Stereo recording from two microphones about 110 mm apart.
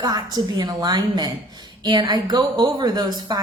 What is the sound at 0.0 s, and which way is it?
A woman's voice, 40° right (ahead or behind).